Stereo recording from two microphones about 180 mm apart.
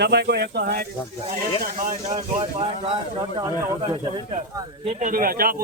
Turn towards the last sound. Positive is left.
turn(degrees=-55)  # may be behind; listen again after turning